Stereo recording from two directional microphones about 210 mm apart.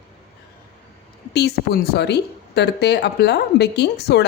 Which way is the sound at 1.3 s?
50° left (ahead or behind).